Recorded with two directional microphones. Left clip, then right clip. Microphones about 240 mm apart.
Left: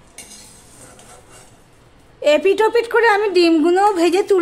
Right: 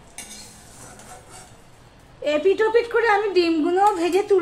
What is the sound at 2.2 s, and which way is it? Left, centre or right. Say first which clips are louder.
A woman's voice: left 5 dB; left.